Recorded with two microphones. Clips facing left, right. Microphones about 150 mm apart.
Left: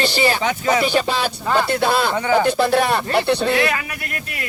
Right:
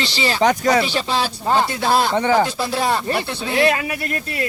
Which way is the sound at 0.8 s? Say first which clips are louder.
Left 4 dB; 45° left (ahead or behind).